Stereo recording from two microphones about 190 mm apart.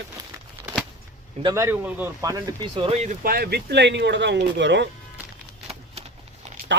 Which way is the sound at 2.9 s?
40° right (ahead or behind).